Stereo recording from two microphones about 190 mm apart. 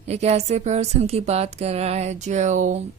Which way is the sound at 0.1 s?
35° right (ahead or behind).